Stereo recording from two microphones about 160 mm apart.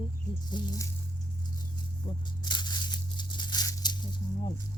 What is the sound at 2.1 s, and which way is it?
Tearing, 30° left (ahead or behind).